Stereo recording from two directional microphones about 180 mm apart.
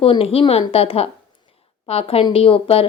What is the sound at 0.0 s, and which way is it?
Speech, 30° left (ahead or behind).